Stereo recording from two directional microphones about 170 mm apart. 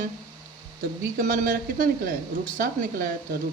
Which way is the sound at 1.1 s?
55° right (ahead or behind).